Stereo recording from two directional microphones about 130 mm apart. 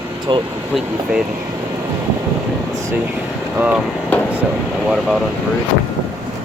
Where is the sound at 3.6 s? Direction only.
10° right (ahead or behind).